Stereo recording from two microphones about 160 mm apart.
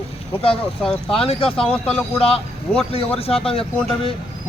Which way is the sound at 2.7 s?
35° left (ahead or behind).